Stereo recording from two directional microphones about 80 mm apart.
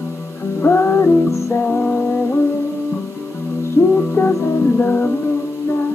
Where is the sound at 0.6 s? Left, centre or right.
Left.